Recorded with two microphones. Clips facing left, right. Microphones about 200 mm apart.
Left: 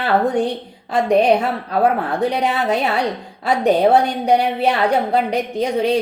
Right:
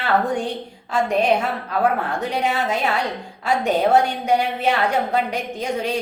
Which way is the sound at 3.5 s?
35° left (ahead or behind).